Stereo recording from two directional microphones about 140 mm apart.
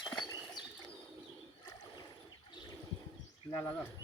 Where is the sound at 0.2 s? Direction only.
25° left (ahead or behind).